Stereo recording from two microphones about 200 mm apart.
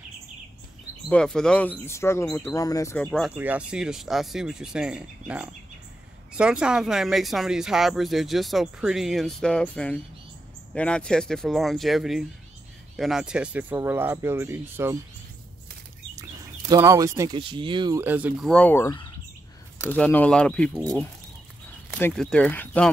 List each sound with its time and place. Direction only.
1.0 s speech: 5° left (ahead or behind)
16.2 s speech: 15° right (ahead or behind)
18.0 s speech: 10° right (ahead or behind)
18.5 s speech: 10° left (ahead or behind)
21.9 s speech: 5° left (ahead or behind)